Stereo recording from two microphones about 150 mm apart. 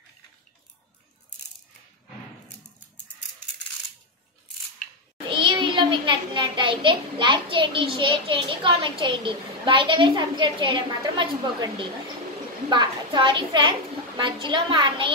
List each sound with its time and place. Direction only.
5.3 s a child's voice: 35° right (ahead or behind)